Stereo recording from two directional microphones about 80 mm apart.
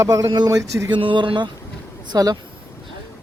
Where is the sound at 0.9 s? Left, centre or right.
Right.